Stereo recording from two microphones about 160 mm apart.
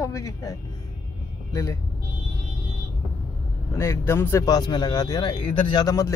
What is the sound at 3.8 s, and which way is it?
Speech, 15° left (ahead or behind).